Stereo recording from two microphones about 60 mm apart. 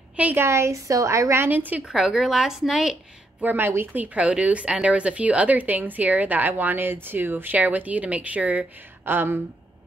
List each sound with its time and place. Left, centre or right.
0.1 s a sound: right
0.4 s a woman's voice: right
1.4 s a woman's voice: right
1.9 s speech: centre
3.3 s speech: right
9.0 s a woman's voice: right